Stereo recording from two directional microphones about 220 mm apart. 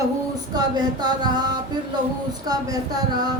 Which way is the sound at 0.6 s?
20° right (ahead or behind).